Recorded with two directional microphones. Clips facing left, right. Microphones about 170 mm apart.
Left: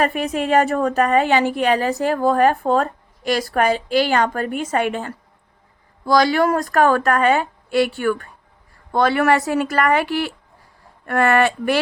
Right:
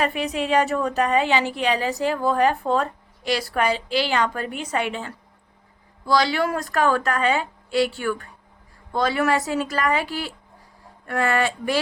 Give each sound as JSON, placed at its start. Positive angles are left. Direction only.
{"t": 0.0, "sound": "a woman's voice", "side_deg": 50}